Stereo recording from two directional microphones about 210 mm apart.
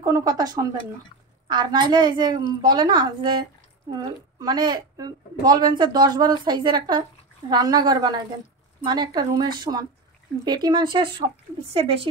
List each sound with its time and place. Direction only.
0.0 s a woman's voice: 15° right (ahead or behind)